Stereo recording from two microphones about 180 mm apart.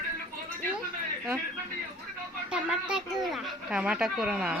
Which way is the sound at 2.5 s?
5° right (ahead or behind).